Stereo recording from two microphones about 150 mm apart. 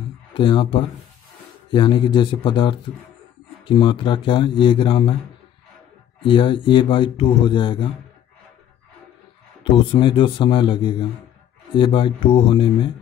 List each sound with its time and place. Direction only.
0.3 s speech: 35° left (ahead or behind)
6.2 s speech: 35° left (ahead or behind)
9.6 s speech: 35° left (ahead or behind)